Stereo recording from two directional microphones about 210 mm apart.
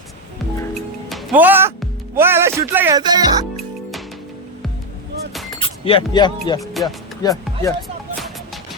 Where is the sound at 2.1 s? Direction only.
10° right (ahead or behind).